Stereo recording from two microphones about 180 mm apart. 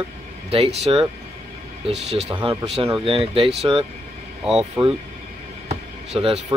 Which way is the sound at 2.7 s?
30° right (ahead or behind).